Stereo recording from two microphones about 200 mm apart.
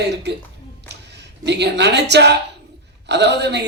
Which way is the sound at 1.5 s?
60° right (ahead or behind).